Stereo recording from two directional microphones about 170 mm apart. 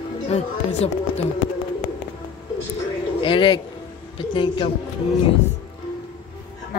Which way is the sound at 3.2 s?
30° left (ahead or behind).